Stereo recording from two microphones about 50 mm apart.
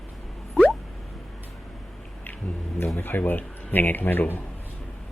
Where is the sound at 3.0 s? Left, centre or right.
Left.